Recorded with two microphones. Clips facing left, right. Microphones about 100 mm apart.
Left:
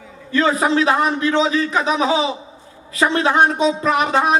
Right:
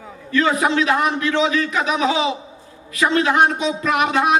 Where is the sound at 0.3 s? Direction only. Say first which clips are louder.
Left 1 dB; 30° left (ahead or behind).